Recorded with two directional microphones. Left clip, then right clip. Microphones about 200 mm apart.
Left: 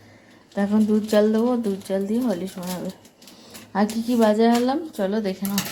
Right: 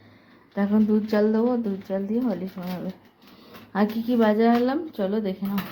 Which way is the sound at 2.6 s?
40° left (ahead or behind).